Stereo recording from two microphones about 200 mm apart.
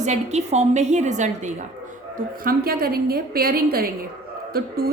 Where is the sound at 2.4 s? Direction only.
45° right (ahead or behind).